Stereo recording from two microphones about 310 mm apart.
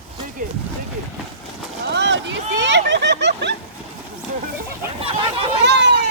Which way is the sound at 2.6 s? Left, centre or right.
Right.